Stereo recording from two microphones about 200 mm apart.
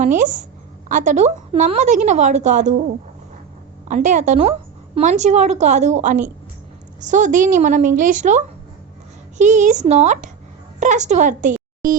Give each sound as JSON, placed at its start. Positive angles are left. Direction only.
{"t": 0.0, "sound": "a woman's voice", "side_deg": -40}
{"t": 3.8, "sound": "a woman's voice", "side_deg": -40}